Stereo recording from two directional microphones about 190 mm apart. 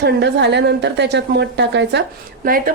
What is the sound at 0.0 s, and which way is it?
A woman's voice, 60° right (ahead or behind).